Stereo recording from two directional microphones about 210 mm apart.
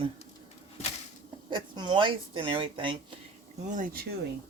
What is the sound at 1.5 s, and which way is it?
Speech, 20° right (ahead or behind).